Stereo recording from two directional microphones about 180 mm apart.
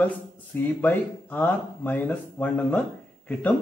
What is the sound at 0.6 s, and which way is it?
Speech, 10° left (ahead or behind).